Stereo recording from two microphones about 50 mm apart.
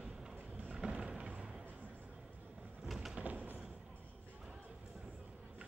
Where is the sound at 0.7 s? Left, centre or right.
Centre.